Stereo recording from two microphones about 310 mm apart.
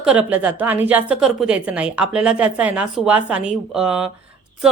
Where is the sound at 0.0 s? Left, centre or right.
Centre.